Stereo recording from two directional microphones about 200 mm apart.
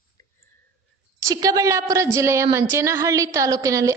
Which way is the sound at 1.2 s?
15° right (ahead or behind).